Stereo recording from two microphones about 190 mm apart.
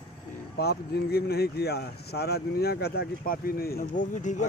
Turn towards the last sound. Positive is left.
turn(degrees=40)  # may be behind; listen again after turning